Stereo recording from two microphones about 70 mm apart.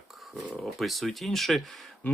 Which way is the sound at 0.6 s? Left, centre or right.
Centre.